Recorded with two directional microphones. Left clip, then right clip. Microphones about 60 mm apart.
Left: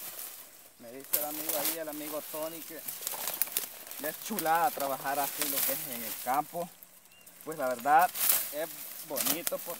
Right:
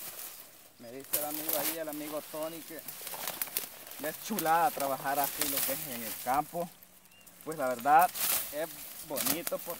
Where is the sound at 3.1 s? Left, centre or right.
Left.